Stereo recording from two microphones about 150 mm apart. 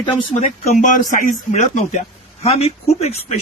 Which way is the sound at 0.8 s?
60° left (ahead or behind).